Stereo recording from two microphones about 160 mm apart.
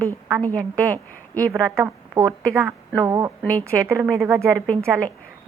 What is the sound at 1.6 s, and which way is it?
Speech, 15° right (ahead or behind).